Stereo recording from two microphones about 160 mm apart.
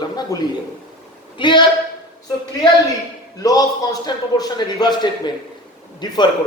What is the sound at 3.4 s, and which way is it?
A man's voice, 25° left (ahead or behind).